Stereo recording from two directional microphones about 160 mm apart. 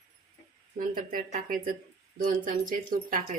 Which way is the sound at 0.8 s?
55° right (ahead or behind).